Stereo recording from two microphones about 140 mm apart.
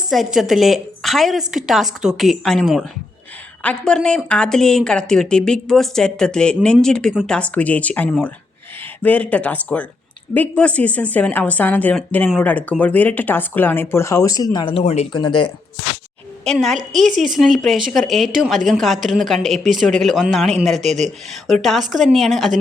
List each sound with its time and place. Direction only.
0.1 s speech: centre (ahead or behind); by 15.0 s 45° left (ahead or behind)
15.1 s speech: 35° left (ahead or behind)
16.4 s speech: 5° left (ahead or behind)